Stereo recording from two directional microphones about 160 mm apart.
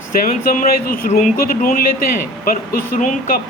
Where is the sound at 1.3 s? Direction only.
65° left (ahead or behind).